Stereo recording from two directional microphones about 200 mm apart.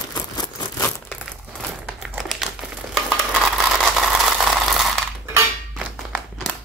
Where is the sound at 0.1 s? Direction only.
20° left (ahead or behind).